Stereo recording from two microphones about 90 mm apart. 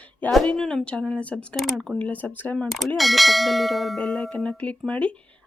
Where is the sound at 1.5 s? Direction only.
Centre (ahead or behind).